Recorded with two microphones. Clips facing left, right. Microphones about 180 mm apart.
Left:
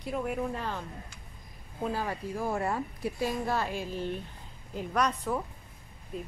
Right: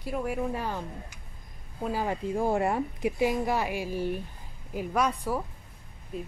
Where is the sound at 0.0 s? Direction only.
5° right (ahead or behind).